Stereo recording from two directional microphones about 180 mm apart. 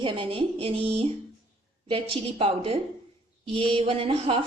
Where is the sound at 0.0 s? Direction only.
30° right (ahead or behind).